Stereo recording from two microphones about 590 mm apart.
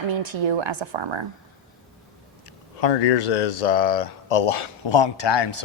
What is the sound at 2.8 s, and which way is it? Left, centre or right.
Speech, left.